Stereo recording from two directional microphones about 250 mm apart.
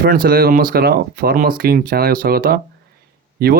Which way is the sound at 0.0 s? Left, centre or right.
Right.